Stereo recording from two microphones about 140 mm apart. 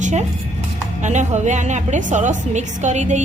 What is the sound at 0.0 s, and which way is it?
A woman's voice, 55° right (ahead or behind).